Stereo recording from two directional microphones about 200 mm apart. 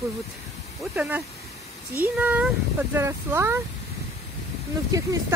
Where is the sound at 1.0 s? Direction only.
10° right (ahead or behind).